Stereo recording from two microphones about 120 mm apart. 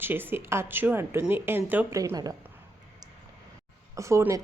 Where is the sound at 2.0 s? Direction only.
30° right (ahead or behind).